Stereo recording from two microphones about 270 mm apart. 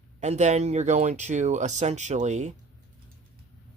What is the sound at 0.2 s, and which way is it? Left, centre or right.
Speech, right.